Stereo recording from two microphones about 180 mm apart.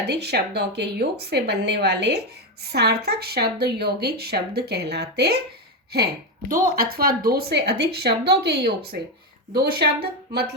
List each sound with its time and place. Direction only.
0.1 s speech: 65° right (ahead or behind)
6.5 s speech: 55° right (ahead or behind)